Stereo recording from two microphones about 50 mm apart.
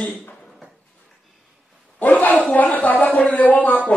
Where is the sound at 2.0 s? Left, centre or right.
Left.